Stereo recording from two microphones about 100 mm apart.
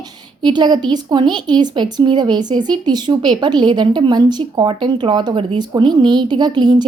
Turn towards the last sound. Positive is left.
turn(degrees=-45)  # may be behind; listen again after turning